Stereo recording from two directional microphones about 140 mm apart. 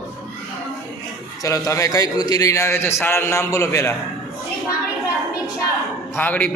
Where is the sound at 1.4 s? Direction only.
20° left (ahead or behind).